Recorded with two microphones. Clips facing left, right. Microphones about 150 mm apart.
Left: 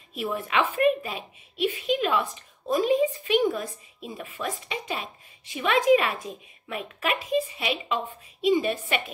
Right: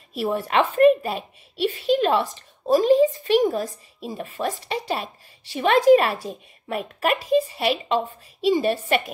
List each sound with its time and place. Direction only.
0.1 s a woman's voice: 35° right (ahead or behind)